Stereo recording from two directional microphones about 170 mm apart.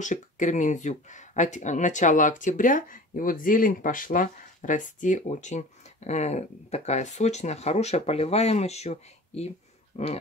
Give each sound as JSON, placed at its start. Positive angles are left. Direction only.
{"t": 0.0, "sound": "speech", "side_deg": 45}